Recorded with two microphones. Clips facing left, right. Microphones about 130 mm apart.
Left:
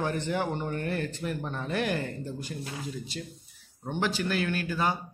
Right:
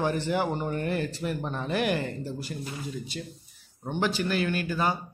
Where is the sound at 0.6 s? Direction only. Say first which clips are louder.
Right 2 dB; 15° right (ahead or behind).